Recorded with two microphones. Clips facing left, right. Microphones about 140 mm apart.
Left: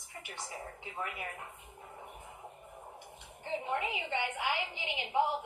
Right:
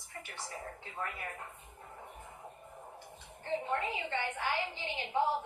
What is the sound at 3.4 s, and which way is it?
A woman's voice, 15° left (ahead or behind).